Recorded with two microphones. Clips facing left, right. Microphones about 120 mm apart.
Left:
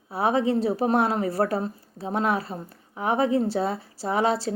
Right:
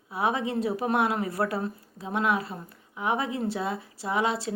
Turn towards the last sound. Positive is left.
turn(degrees=35)  # may be behind; listen again after turning